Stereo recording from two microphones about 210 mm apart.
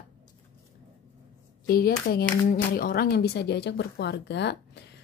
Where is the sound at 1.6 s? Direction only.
45° left (ahead or behind).